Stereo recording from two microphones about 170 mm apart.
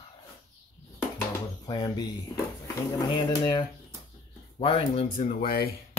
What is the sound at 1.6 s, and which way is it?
Speech, 25° left (ahead or behind).